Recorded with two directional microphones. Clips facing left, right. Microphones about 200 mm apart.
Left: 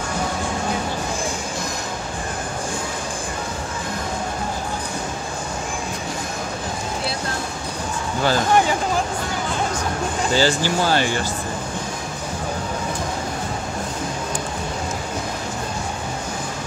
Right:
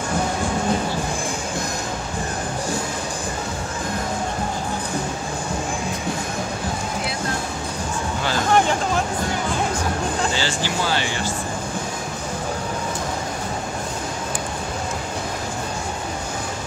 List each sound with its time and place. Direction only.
10.3 s speech: 45° left (ahead or behind)